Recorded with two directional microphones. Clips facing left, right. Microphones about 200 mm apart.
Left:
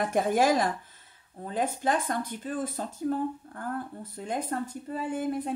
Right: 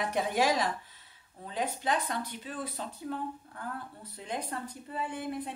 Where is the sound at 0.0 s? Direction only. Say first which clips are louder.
Left 4 dB; 50° left (ahead or behind).